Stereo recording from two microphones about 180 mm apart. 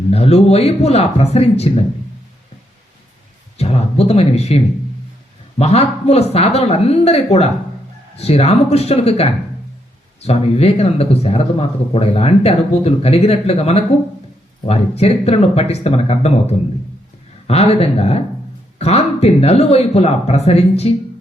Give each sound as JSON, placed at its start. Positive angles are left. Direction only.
{"t": 0.1, "sound": "speech", "side_deg": 35}
{"t": 3.6, "sound": "speech", "side_deg": 35}